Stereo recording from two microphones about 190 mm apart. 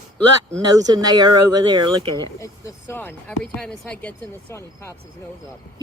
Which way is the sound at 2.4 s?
15° left (ahead or behind).